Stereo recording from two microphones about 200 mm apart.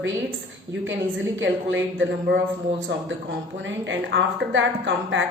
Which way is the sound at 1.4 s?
70° right (ahead or behind).